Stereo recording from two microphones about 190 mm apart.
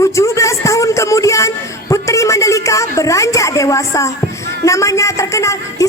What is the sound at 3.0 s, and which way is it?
A woman's voice, 15° left (ahead or behind).